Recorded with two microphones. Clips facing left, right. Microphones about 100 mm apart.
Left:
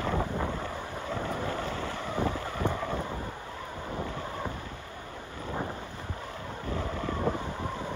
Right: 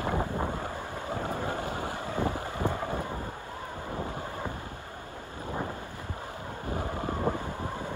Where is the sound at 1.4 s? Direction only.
25° right (ahead or behind).